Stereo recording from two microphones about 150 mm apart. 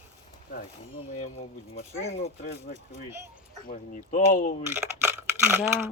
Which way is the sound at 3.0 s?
15° right (ahead or behind).